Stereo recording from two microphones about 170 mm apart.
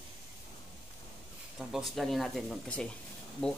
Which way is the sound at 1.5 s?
Centre (ahead or behind).